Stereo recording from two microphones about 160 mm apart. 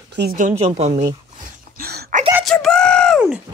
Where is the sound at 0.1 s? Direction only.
90° right.